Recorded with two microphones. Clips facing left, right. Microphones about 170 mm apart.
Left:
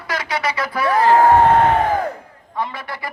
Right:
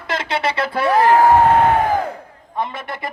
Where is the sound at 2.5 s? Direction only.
20° right (ahead or behind).